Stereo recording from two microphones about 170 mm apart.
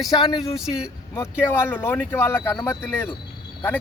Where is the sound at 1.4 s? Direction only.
15° left (ahead or behind).